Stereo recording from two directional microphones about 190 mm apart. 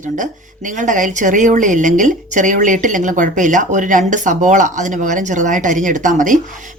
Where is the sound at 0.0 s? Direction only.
40° right (ahead or behind).